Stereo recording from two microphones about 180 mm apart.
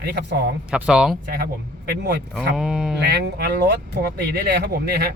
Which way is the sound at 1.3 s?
60° right (ahead or behind).